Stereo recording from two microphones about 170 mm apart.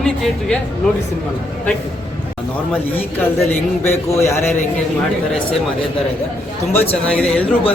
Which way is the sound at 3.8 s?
15° left (ahead or behind).